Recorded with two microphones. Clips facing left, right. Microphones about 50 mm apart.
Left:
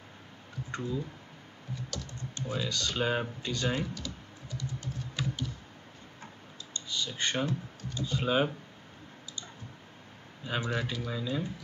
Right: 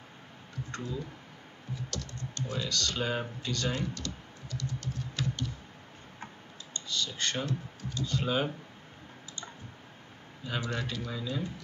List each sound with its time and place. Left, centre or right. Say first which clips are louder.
0.7 s speech: left 3 dB; centre
1.9 s typing: right 1 dB; centre
2.5 s speech: left 1 dB; centre
5.1 s computer keyboard: even; centre
6.9 s speech: left 1 dB; centre
10.4 s speech: left 2 dB; centre
10.7 s speech: left 2 dB; centre